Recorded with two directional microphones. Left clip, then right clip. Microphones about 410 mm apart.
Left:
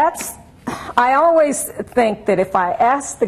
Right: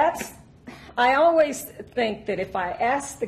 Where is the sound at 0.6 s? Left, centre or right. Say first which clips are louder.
Left 6 dB; left.